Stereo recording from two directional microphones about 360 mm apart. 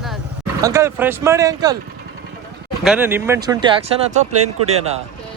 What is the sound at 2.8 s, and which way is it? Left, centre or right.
Speech, centre.